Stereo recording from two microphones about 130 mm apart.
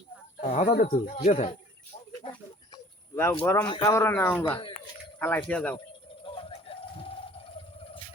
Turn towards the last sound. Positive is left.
turn(degrees=45)  # may be behind; listen again after turning